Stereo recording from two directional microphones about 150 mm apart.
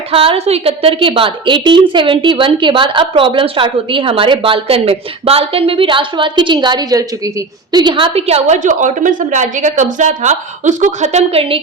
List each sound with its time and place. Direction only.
0.1 s a woman's voice: 40° right (ahead or behind)